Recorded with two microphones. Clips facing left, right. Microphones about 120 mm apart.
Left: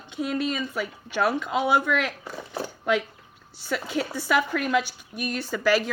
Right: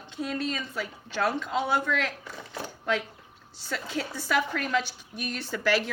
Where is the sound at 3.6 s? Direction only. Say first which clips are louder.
Left 5 dB; 10° left (ahead or behind).